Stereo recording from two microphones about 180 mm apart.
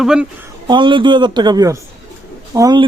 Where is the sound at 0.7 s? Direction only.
25° right (ahead or behind).